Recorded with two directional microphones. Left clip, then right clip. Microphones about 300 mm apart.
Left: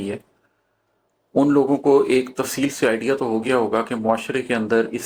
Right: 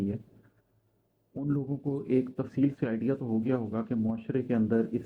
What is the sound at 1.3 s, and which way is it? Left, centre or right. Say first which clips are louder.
Speech: left 17 dB; left.